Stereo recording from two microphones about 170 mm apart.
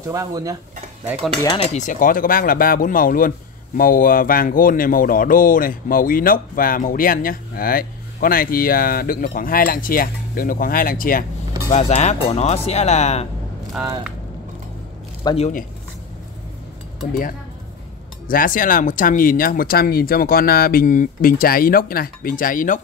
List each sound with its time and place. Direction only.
0.0 s speech: 20° right (ahead or behind)
1.6 s speech: 40° left (ahead or behind)
11.7 s speech: 40° left (ahead or behind)
15.3 s speech: 40° left (ahead or behind)
18.2 s speech: 55° left (ahead or behind)